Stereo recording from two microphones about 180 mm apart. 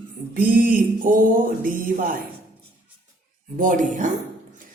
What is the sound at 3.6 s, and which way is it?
Speech, 45° right (ahead or behind).